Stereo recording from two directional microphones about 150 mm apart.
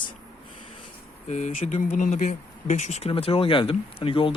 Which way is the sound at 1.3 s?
50° left (ahead or behind).